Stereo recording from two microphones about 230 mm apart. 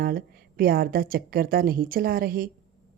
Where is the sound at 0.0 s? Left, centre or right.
Right.